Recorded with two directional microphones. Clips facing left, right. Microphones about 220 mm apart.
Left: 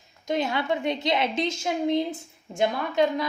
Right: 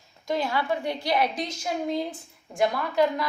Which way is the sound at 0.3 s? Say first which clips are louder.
Left 1 dB; 20° left (ahead or behind).